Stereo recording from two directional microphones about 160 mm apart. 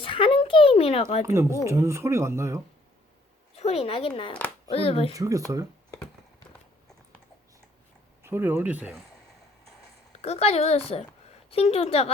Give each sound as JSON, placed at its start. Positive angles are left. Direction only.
{"t": 0.0, "sound": "a sound", "side_deg": 35}
{"t": 1.2, "sound": "speech", "side_deg": -15}
{"t": 3.5, "sound": "speech", "side_deg": 40}
{"t": 5.1, "sound": "speech", "side_deg": -20}
{"t": 8.2, "sound": "speech", "side_deg": -15}
{"t": 10.1, "sound": "a woman's voice", "side_deg": 40}